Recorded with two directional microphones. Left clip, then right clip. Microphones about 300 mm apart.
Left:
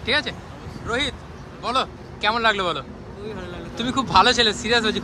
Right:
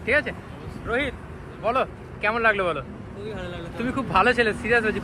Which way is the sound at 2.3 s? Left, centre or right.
Centre.